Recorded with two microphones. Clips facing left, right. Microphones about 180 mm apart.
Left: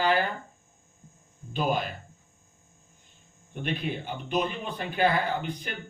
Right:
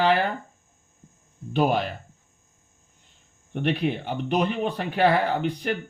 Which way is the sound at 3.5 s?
65° right (ahead or behind).